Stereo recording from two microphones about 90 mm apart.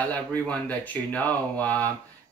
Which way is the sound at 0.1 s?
20° left (ahead or behind).